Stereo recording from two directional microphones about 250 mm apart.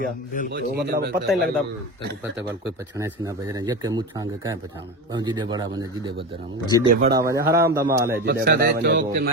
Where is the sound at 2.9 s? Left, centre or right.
Centre.